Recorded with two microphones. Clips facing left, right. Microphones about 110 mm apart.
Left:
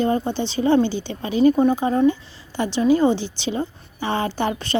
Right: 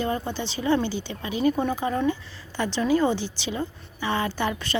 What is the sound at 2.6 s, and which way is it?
A woman's voice, 20° left (ahead or behind).